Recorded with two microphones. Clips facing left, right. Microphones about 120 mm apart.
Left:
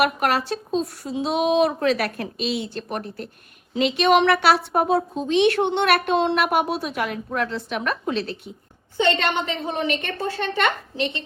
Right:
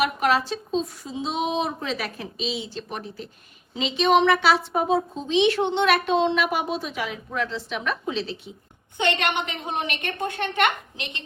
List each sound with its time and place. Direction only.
0.0 s a woman's voice: 60° left (ahead or behind)
9.0 s a woman's voice: 15° right (ahead or behind)